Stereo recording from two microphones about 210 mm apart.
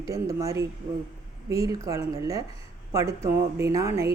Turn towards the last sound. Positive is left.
turn(degrees=-15)  # may be behind; listen again after turning